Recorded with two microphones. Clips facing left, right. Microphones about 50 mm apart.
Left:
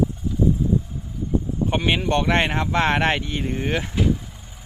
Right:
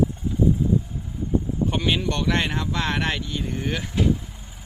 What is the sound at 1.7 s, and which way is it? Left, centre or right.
Speech, left.